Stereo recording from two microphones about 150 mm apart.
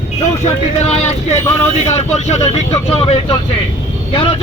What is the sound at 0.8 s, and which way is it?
A man's voice, 45° left (ahead or behind).